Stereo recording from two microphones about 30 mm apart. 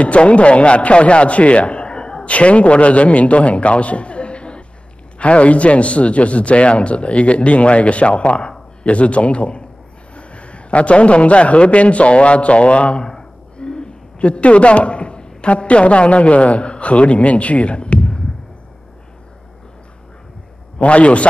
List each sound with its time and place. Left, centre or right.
0.0 s a man's voice: left
2.2 s a man's voice: left
13.0 s a sound: left
15.5 s a man's voice: left
20.8 s a man's voice: left